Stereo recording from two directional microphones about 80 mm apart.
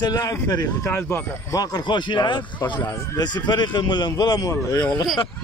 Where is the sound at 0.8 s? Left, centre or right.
Left.